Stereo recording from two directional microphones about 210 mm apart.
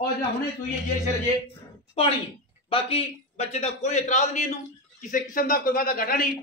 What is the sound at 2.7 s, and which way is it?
A man's voice, 25° left (ahead or behind).